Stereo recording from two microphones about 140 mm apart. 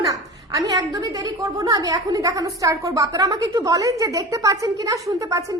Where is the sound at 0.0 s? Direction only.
25° right (ahead or behind).